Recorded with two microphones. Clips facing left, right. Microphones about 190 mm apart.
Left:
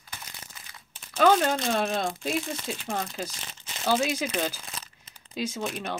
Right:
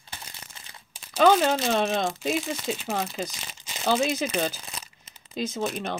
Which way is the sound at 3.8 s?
10° left (ahead or behind).